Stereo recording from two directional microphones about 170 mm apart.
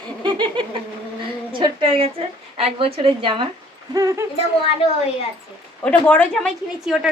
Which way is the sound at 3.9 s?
20° right (ahead or behind).